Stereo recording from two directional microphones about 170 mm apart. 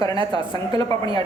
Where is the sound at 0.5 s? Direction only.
25° left (ahead or behind).